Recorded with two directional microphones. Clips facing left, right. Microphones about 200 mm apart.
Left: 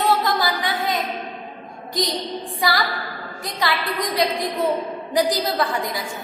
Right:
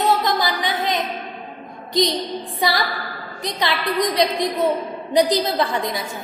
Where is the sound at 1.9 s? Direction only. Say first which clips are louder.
Right 4 dB; 20° right (ahead or behind).